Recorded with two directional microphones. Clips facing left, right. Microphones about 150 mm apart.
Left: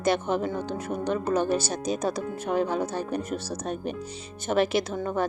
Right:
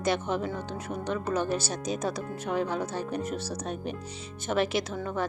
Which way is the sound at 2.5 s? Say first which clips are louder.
Left 3 dB; 45° left (ahead or behind).